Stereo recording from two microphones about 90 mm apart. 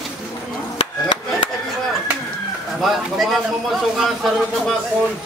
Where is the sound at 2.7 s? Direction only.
Centre (ahead or behind).